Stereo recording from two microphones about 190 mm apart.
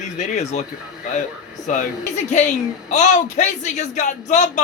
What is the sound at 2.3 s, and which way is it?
Speech, 40° left (ahead or behind).